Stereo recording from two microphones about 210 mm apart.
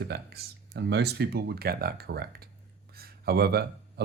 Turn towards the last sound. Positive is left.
turn(degrees=-50)  # may be behind; listen again after turning